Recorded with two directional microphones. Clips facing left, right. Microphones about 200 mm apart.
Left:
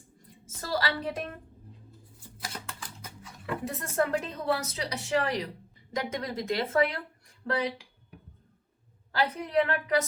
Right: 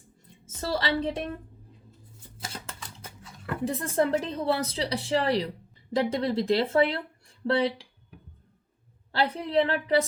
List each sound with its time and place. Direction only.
0.6 s a woman's voice: 25° right (ahead or behind)
2.4 s a sound: 25° right (ahead or behind)
3.6 s speech: 30° right (ahead or behind)
9.1 s speech: 30° right (ahead or behind)